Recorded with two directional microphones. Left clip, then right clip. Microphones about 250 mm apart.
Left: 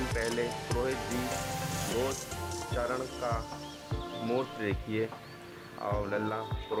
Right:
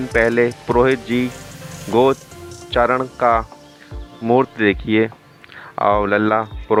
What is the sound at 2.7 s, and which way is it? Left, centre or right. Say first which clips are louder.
Speech: right 18 dB; right.